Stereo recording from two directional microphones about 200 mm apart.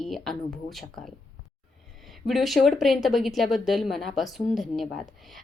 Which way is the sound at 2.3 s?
Centre (ahead or behind).